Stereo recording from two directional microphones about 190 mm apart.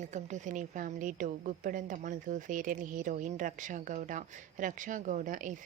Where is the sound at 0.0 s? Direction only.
40° right (ahead or behind).